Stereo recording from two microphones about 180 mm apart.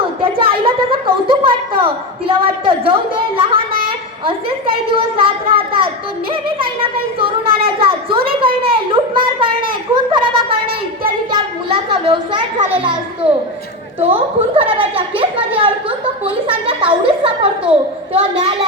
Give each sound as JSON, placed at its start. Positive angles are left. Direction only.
{"t": 0.2, "sound": "a woman's voice", "side_deg": -30}
{"t": 4.9, "sound": "a woman's voice", "side_deg": -30}
{"t": 9.1, "sound": "a sound", "side_deg": -30}
{"t": 14.0, "sound": "a woman's voice", "side_deg": -30}